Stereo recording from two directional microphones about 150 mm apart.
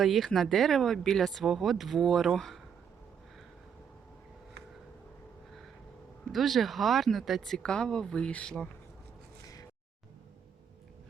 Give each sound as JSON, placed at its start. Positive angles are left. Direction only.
{"t": 0.0, "sound": "speech", "side_deg": 0}
{"t": 6.3, "sound": "speech", "side_deg": 0}